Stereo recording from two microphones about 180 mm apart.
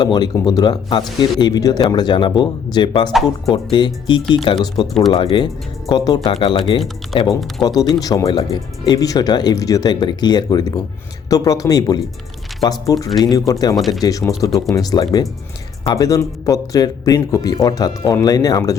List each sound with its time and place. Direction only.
0.0 s speech: 25° left (ahead or behind)
3.1 s speech: centre (ahead or behind)
3.5 s speech: 25° left (ahead or behind)
13.1 s speech: centre (ahead or behind)
13.3 s speech: 20° left (ahead or behind)
13.7 s speech: centre (ahead or behind)
14.0 s speech: 20° left (ahead or behind)